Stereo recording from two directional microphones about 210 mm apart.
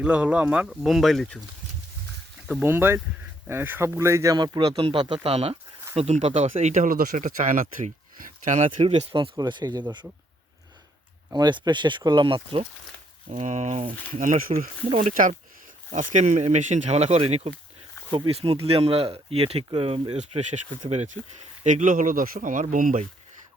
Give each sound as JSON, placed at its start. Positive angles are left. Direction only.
{"t": 0.0, "sound": "speech", "side_deg": -5}
{"t": 2.5, "sound": "speech", "side_deg": -10}
{"t": 11.3, "sound": "speech", "side_deg": -20}
{"t": 13.3, "sound": "speech", "side_deg": -35}